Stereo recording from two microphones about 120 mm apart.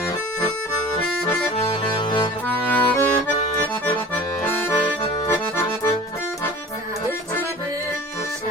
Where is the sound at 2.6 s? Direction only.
15° left (ahead or behind).